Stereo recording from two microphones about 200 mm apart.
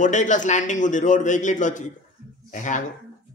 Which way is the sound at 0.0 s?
35° left (ahead or behind).